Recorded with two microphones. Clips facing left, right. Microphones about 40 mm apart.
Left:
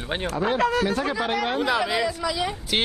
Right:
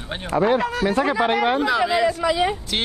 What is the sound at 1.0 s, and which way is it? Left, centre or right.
Speech, right.